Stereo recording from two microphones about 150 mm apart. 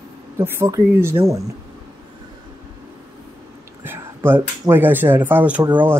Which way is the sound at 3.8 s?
15° right (ahead or behind).